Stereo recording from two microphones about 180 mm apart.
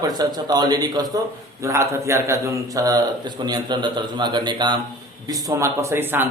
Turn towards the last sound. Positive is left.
turn(degrees=-10)  # may be behind; listen again after turning